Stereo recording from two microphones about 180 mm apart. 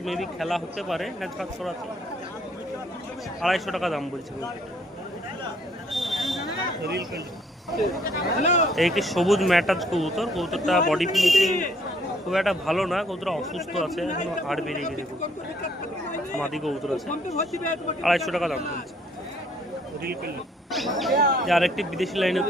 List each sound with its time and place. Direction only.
0.0 s speech: centre (ahead or behind)
3.4 s speech: centre (ahead or behind)
5.9 s a sound: centre (ahead or behind)
8.0 s speech: 40° left (ahead or behind)
8.7 s speech: centre (ahead or behind)
16.4 s speech: centre (ahead or behind)
18.0 s speech: centre (ahead or behind)
20.7 s speech: centre (ahead or behind)
21.2 s speech: 60° right (ahead or behind)
21.4 s speech: centre (ahead or behind)